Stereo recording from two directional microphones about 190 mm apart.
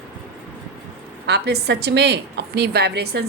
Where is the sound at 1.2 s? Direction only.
60° right (ahead or behind).